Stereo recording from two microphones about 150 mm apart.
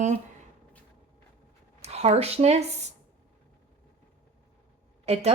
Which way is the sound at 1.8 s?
45° right (ahead or behind).